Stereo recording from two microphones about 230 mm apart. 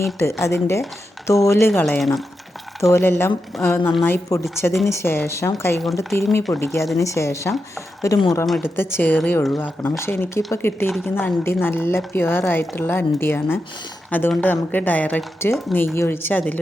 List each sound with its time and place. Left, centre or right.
0.2 s speech: centre